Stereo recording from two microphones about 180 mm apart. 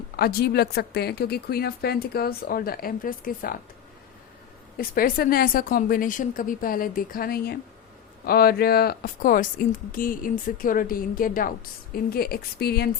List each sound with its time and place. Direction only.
0.2 s speech: 60° left (ahead or behind)
4.8 s speech: 55° left (ahead or behind)